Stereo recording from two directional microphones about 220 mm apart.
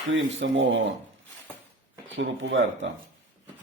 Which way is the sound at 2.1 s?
60° right (ahead or behind).